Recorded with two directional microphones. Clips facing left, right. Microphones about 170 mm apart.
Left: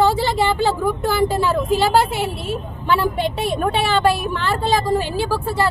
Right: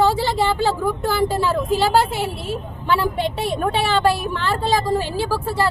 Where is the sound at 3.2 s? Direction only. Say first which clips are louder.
Left 1 dB; 15° left (ahead or behind).